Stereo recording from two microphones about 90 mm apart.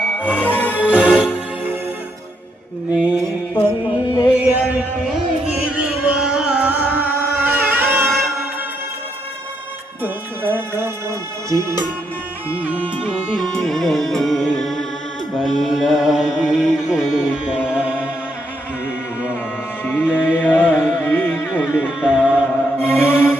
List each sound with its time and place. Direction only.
0.0 s music: 15° left (ahead or behind)
0.9 s music: 10° right (ahead or behind)
2.9 s mantra: 15° right (ahead or behind)
4.4 s a sound: 15° right (ahead or behind)
5.5 s music: 10° right (ahead or behind)
6.7 s music: 20° right (ahead or behind)
10.0 s music: 25° right (ahead or behind)
13.3 s music: centre (ahead or behind)
19.8 s music: 20° left (ahead or behind)
21.8 s music: 5° right (ahead or behind)
22.3 s mantra: 10° right (ahead or behind)
22.9 s music: 20° left (ahead or behind)